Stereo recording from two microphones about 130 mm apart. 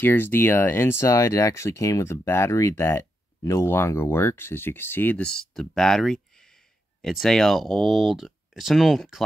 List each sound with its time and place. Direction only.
0.0 s speech: 15° left (ahead or behind); by 9.2 s centre (ahead or behind)